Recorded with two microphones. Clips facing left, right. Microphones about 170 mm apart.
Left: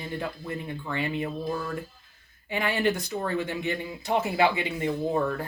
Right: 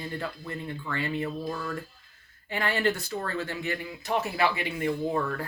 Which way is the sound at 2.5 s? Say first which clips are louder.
Left 1 dB; 15° left (ahead or behind).